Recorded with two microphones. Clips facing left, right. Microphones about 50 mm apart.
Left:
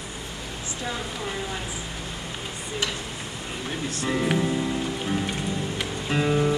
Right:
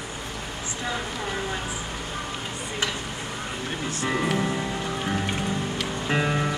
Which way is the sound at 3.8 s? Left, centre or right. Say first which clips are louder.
Even; right.